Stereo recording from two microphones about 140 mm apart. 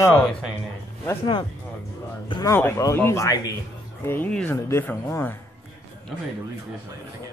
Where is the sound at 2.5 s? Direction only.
20° left (ahead or behind).